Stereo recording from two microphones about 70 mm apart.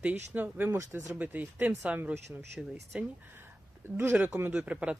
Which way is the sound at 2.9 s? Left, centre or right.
Centre.